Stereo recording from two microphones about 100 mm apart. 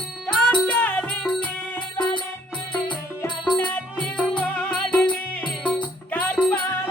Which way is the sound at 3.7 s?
10° left (ahead or behind).